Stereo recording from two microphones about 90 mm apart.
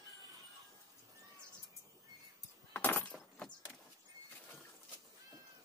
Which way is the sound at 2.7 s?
20° left (ahead or behind).